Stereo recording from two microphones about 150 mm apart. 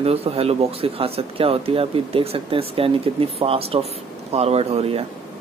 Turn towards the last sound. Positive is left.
turn(degrees=-40)  # may be behind; listen again after turning